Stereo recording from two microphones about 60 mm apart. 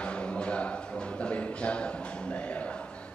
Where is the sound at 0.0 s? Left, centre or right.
Centre.